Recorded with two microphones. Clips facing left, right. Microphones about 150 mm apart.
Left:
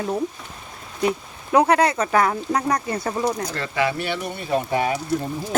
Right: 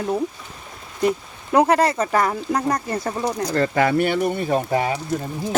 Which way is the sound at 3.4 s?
40° right (ahead or behind).